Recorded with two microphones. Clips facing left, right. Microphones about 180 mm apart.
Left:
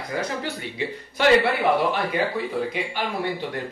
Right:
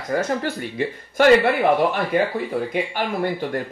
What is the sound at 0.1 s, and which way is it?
Speech, 50° right (ahead or behind).